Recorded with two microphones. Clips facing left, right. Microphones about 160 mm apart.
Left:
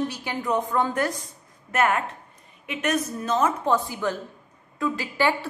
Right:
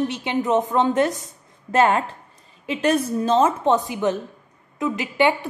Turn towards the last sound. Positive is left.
turn(degrees=-20)  # may be behind; listen again after turning